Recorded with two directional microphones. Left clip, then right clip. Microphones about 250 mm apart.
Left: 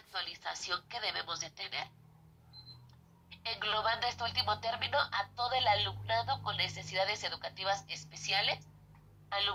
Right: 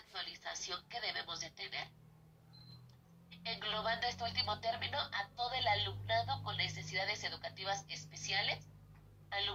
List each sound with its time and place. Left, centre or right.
0.1 s a woman's voice: left
3.2 s speech: left